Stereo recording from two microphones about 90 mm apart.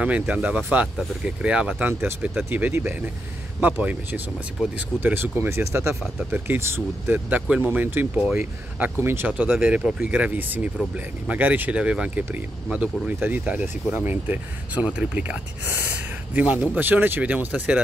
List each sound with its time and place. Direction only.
0.0 s speech: 15° right (ahead or behind)
1.9 s speech: 25° right (ahead or behind)
6.3 s speech: 20° right (ahead or behind)
9.3 s speech: 15° right (ahead or behind)
16.3 s speech: 15° right (ahead or behind)